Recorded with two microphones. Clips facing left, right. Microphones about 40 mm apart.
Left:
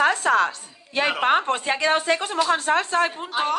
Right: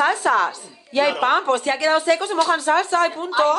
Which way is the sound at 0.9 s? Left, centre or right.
Left.